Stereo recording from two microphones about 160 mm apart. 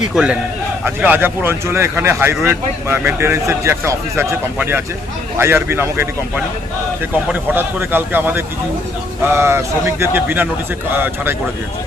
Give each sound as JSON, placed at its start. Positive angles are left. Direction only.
{"t": 0.1, "sound": "a man's voice", "side_deg": -5}